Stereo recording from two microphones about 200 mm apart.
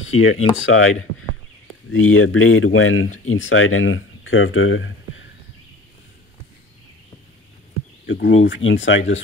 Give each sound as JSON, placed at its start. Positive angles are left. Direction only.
{"t": 0.0, "sound": "speech", "side_deg": 80}
{"t": 8.1, "sound": "speech", "side_deg": 65}